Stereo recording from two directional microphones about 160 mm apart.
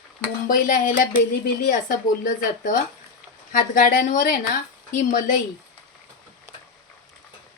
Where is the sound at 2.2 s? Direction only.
60° left (ahead or behind).